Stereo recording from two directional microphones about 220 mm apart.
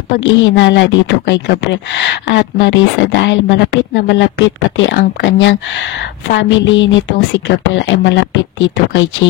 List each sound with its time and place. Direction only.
0.1 s a woman's voice: 55° left (ahead or behind)